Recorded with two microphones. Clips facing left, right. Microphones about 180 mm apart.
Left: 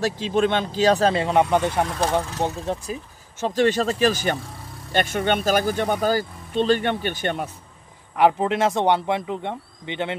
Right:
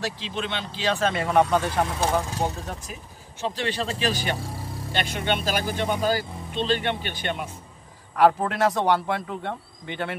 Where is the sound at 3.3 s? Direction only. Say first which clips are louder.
Left 8 dB; 45° left (ahead or behind).